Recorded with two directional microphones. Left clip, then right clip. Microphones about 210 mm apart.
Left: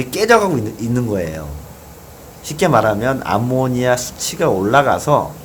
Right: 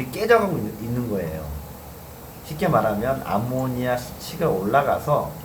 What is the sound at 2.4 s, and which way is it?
Speech, 55° left (ahead or behind).